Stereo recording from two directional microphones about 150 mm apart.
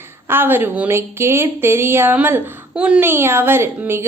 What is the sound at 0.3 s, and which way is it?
A woman's voice, 15° right (ahead or behind).